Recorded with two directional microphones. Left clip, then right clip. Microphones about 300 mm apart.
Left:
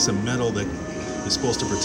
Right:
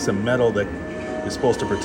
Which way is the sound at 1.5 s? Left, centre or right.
Centre.